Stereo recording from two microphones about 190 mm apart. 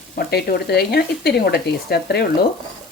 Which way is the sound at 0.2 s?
55° left (ahead or behind).